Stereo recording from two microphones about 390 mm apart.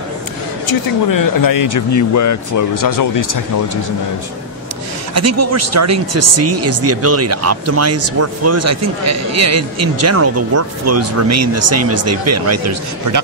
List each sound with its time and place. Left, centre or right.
1.0 s speech: left
5.1 s speech: right